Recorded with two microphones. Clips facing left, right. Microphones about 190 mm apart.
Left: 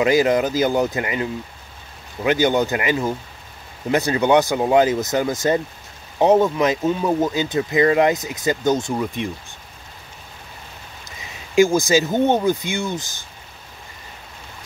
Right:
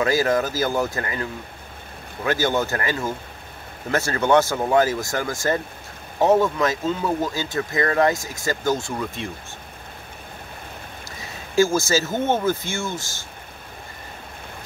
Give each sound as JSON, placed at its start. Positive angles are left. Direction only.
{"t": 0.0, "sound": "speech", "side_deg": 20}
{"t": 11.1, "sound": "speech", "side_deg": 15}